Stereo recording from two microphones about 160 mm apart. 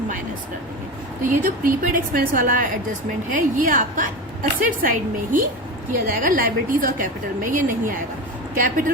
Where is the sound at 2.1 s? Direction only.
60° right (ahead or behind).